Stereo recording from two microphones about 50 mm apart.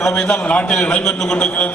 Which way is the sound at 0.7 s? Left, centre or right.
Centre.